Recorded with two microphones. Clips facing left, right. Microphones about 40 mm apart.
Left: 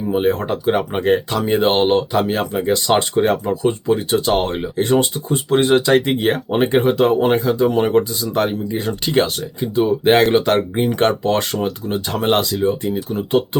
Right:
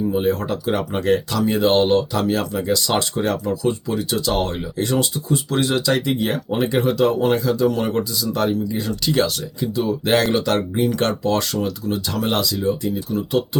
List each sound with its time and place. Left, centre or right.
0.1 s speech: left